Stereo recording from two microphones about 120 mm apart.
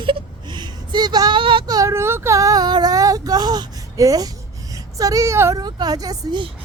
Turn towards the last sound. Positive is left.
turn(degrees=-35)  # may be behind; listen again after turning